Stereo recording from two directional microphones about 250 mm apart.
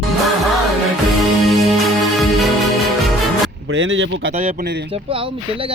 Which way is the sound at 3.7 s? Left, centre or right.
Right.